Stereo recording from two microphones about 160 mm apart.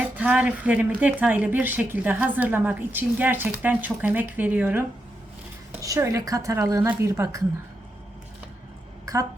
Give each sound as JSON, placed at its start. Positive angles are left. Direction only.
{"t": 0.0, "sound": "a woman's voice", "side_deg": -10}